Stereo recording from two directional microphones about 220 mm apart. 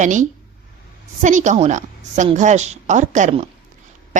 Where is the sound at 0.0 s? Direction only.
35° right (ahead or behind).